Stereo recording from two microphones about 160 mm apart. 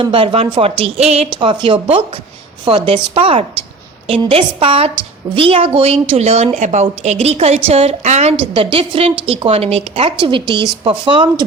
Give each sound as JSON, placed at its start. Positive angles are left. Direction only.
{"t": 0.0, "sound": "a woman's voice", "side_deg": -30}